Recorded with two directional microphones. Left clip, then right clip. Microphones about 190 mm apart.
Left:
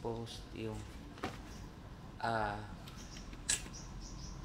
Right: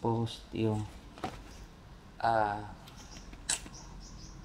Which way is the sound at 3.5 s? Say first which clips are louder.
Right 2 dB; 40° right (ahead or behind).